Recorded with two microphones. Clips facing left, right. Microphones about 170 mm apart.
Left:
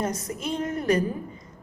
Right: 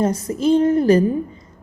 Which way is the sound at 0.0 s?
30° right (ahead or behind).